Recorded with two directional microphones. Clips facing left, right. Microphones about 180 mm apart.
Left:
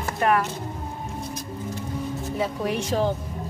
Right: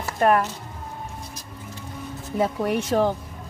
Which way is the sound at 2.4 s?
50° right (ahead or behind).